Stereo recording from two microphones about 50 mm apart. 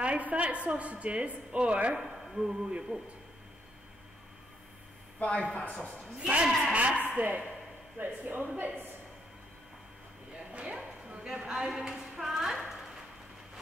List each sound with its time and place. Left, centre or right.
0.0 s a woman's voice: right
2.0 s speech: centre
5.2 s speech: left
6.1 s a woman's voice: right
6.7 s a sound: right
7.2 s a woman's voice: right
8.0 s speech: right
10.5 s a sound: right
11.3 s speech: centre